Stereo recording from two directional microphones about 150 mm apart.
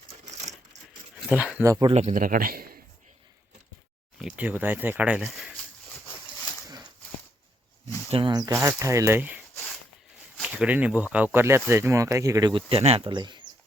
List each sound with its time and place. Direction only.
0.3 s coin: 50° right (ahead or behind)
1.3 s speech: 5° right (ahead or behind)
1.6 s speech: 20° right (ahead or behind)
1.9 s a man's voice: 50° right (ahead or behind); by 2.7 s 80° right
4.2 s speech: 5° right (ahead or behind)
8.1 s speech: 30° right (ahead or behind)
12.6 s speech: 40° right (ahead or behind)
13.1 s speech: 30° right (ahead or behind)